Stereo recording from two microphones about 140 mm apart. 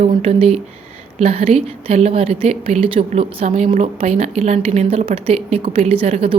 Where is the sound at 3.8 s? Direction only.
50° right (ahead or behind).